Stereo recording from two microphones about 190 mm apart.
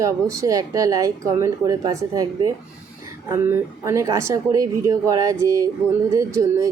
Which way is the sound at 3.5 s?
15° right (ahead or behind).